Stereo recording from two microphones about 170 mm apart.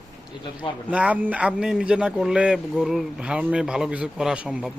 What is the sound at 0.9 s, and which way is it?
A man's voice, 10° right (ahead or behind).